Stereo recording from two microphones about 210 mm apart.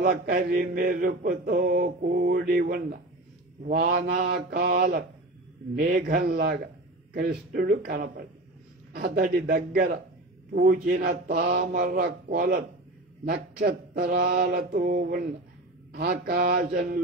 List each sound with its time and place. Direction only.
0.0 s mantra: 40° right (ahead or behind)
3.8 s speech: 45° right (ahead or behind)